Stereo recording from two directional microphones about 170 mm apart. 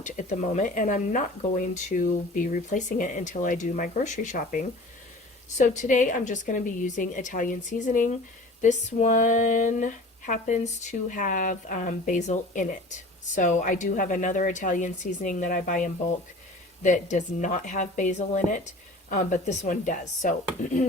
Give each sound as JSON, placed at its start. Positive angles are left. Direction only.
{"t": 0.0, "sound": "speech", "side_deg": 45}